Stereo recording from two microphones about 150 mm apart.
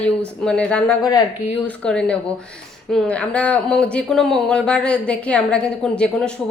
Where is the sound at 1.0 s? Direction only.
25° left (ahead or behind).